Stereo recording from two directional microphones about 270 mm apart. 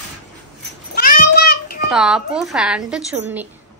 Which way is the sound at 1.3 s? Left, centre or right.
Left.